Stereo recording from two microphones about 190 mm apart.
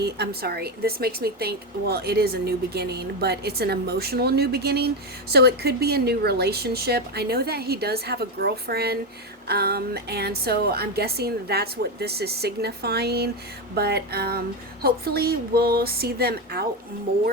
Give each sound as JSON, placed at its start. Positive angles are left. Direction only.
{"t": 0.0, "sound": "speech", "side_deg": -55}